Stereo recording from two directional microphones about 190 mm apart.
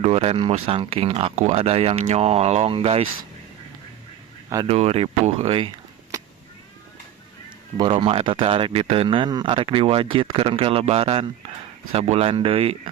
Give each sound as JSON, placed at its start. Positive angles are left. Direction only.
{"t": 0.0, "sound": "speech", "side_deg": -35}
{"t": 4.7, "sound": "speech", "side_deg": -30}
{"t": 6.1, "sound": "cat", "side_deg": -20}
{"t": 7.8, "sound": "speech", "side_deg": -30}